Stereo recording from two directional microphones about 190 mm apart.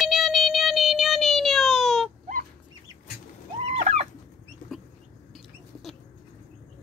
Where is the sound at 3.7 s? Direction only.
35° right (ahead or behind).